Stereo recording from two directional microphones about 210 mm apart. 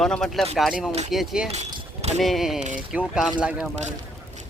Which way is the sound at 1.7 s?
25° right (ahead or behind).